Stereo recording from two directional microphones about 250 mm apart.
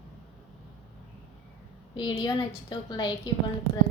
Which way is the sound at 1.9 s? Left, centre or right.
Centre.